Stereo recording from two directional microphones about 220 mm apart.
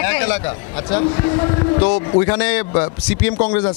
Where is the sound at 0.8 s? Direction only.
20° left (ahead or behind).